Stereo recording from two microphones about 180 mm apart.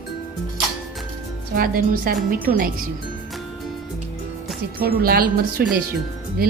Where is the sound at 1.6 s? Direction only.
55° right (ahead or behind).